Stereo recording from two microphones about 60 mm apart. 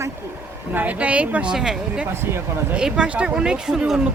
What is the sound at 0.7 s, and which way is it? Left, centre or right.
Speech, right.